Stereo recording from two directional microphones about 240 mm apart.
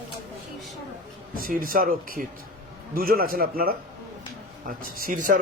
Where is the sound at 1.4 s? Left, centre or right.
Right.